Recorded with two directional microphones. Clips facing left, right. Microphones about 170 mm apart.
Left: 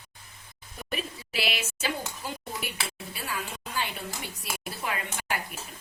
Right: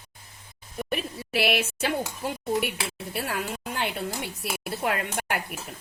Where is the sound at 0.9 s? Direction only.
60° right (ahead or behind).